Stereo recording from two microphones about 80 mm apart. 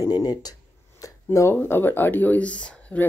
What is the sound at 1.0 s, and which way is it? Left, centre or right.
Speech, left.